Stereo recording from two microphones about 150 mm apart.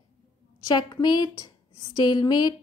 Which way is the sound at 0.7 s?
30° left (ahead or behind).